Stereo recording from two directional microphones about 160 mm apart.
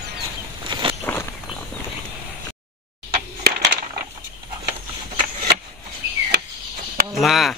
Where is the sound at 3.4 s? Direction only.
80° right.